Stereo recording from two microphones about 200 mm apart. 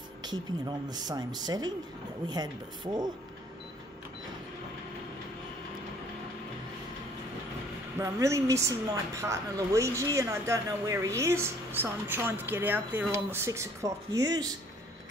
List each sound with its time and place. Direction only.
0.2 s speech: 20° right (ahead or behind)
8.0 s a woman's voice: 15° right (ahead or behind)